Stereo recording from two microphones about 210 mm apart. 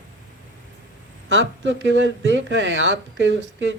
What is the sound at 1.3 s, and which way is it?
Speech, 60° right (ahead or behind).